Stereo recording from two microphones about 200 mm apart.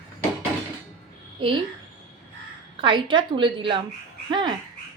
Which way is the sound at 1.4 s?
25° right (ahead or behind).